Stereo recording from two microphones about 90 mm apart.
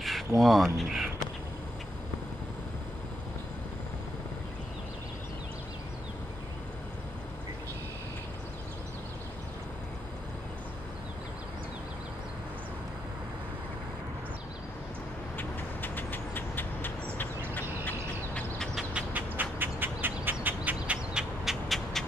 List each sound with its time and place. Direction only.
0.4 s speech: centre (ahead or behind)
15.3 s vehicle: 20° left (ahead or behind)
17.6 s duck: 20° left (ahead or behind)
18.8 s a sound: 15° right (ahead or behind)